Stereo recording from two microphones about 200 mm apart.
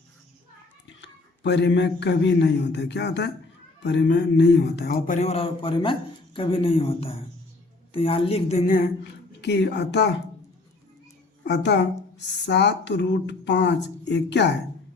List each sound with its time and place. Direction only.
1.0 s a woman's voice: 60° left (ahead or behind); by 8.9 s 40° left (ahead or behind)
9.4 s speech: 60° left (ahead or behind)
11.4 s speech: 60° left (ahead or behind)